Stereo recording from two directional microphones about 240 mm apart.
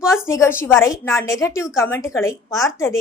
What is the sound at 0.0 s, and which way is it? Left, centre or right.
A woman's voice, centre.